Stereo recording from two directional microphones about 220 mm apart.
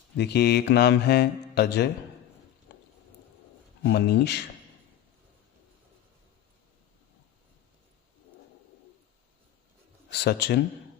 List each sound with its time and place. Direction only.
0.2 s speech: 50° left (ahead or behind)
2.7 s a sound: 55° left (ahead or behind)
3.8 s speech: 50° left (ahead or behind)
10.1 s speech: 50° left (ahead or behind)